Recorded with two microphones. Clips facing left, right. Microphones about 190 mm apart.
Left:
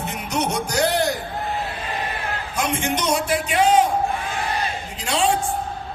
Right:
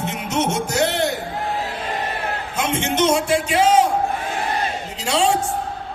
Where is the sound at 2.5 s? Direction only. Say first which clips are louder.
Right 2 dB; 25° right (ahead or behind).